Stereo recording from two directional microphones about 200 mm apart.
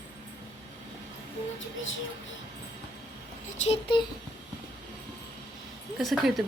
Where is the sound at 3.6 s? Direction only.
30° left (ahead or behind).